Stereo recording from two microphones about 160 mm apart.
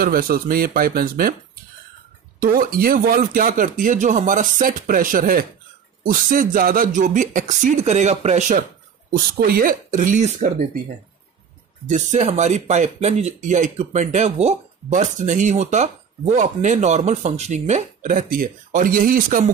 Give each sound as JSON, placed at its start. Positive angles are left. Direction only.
{"t": 0.0, "sound": "speech", "side_deg": -65}
{"t": 9.1, "sound": "speech", "side_deg": -65}
{"t": 11.9, "sound": "speech", "side_deg": -45}